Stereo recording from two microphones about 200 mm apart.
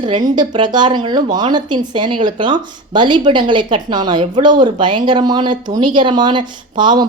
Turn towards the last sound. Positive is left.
turn(degrees=-20)  # may be behind; listen again after turning